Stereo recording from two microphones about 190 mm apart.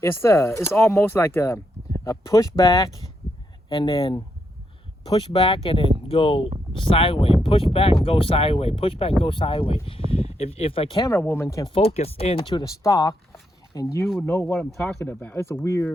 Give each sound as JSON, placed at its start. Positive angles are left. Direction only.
{"t": 0.0, "sound": "speech", "side_deg": 15}
{"t": 3.7, "sound": "speech", "side_deg": 30}
{"t": 11.7, "sound": "speech", "side_deg": 30}